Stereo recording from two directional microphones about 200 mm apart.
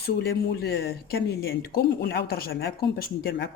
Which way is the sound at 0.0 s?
50° left (ahead or behind).